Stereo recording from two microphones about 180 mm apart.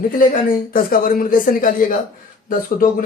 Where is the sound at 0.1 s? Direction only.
50° left (ahead or behind).